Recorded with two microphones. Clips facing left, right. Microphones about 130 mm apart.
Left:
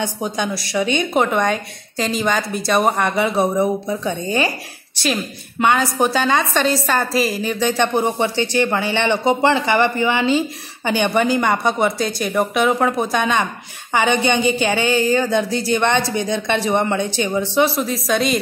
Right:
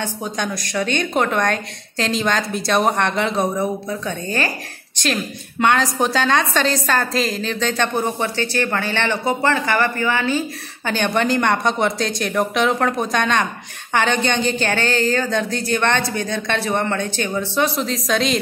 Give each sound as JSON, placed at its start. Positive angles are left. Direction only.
{"t": 0.0, "sound": "a woman's voice", "side_deg": 10}
{"t": 17.8, "sound": "speech", "side_deg": 0}